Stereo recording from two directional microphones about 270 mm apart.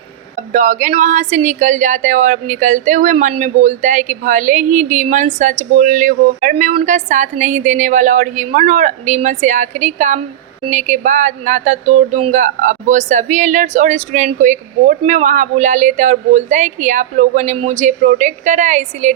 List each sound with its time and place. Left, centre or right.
0.5 s speech: right